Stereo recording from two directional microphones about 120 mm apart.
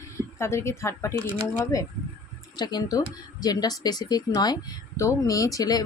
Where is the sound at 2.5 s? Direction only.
35° left (ahead or behind).